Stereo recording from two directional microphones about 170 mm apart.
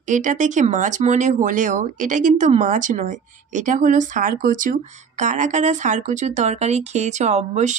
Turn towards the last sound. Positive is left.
turn(degrees=-45)  # may be behind; listen again after turning